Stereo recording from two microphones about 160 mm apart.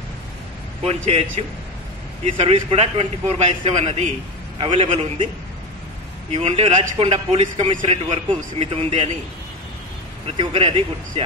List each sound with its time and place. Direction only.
0.8 s a man's voice: 45° right (ahead or behind)
6.3 s a man's voice: 35° right (ahead or behind)
10.2 s a man's voice: 35° right (ahead or behind)